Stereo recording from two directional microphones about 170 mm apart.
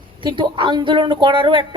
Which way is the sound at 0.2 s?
30° right (ahead or behind).